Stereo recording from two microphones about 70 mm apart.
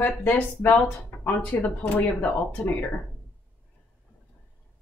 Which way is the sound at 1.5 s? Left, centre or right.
Left.